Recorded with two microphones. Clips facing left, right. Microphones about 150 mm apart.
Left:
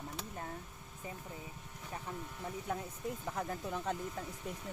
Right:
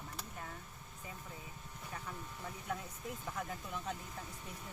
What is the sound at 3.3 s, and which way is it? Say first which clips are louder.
Speech: left 4 dB; 40° left (ahead or behind).